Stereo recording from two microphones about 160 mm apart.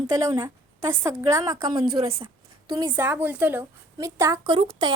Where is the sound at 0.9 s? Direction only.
15° right (ahead or behind).